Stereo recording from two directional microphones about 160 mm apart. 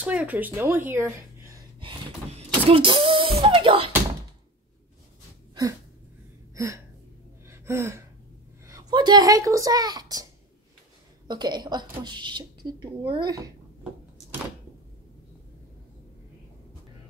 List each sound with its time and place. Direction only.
0.0 s a woman's voice: 10° right (ahead or behind)
1.8 s power windows: 35° right (ahead or behind)
5.5 s a sound: 20° right (ahead or behind)
6.5 s speech: 20° right (ahead or behind)
7.4 s gasp: 15° right (ahead or behind)
8.6 s speech: 25° right (ahead or behind)
11.2 s a woman's voice: 25° right (ahead or behind)